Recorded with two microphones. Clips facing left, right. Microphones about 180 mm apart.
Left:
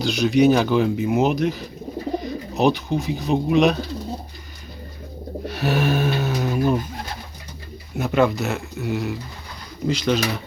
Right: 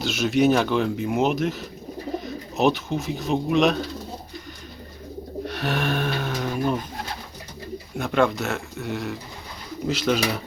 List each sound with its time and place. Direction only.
0.0 s speech: centre (ahead or behind)
5.5 s speech: 5° left (ahead or behind)
7.9 s speech: 5° left (ahead or behind)